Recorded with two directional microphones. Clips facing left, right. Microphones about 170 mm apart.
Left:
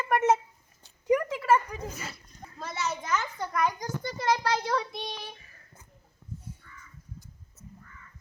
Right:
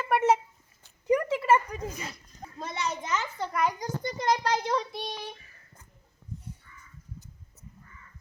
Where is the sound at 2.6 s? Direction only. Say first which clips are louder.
Even; 5° left (ahead or behind).